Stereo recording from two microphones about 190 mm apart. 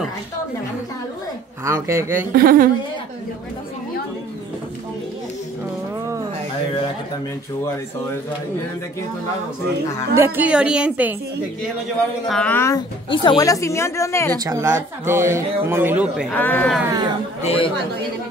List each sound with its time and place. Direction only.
1.6 s speech: 15° right (ahead or behind)
2.3 s speech: 50° right (ahead or behind)
10.1 s speech: 10° right (ahead or behind)
12.3 s speech: 5° left (ahead or behind)
13.1 s speech: 25° left (ahead or behind)
14.4 s speech: 20° right (ahead or behind)
16.3 s speech: 10° left (ahead or behind)
17.4 s speech: 30° left (ahead or behind)